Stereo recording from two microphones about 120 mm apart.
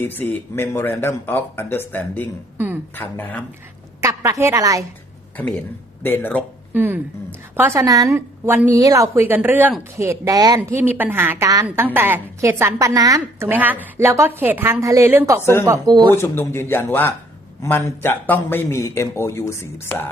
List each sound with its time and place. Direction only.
0.0 s speech: 15° left (ahead or behind)
4.0 s a woman's voice: 25° right (ahead or behind)
6.0 s speech: 15° left (ahead or behind)
6.7 s a woman's voice: 15° right (ahead or behind)
10.0 s speech: 25° right (ahead or behind)
10.6 s a woman's voice: 15° right (ahead or behind); by 16.1 s 35° right (ahead or behind)
16.1 s a man's voice: 20° left (ahead or behind)